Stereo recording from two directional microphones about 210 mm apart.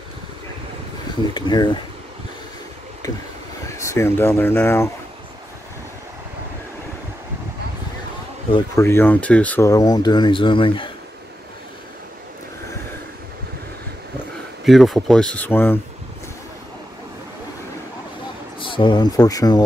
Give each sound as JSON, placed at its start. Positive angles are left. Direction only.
{"t": 1.3, "sound": "speech", "side_deg": 20}
{"t": 3.6, "sound": "speech", "side_deg": 15}
{"t": 8.5, "sound": "speech", "side_deg": 25}
{"t": 8.8, "sound": "speech", "side_deg": 10}
{"t": 14.6, "sound": "speech", "side_deg": 0}
{"t": 18.6, "sound": "speech", "side_deg": 25}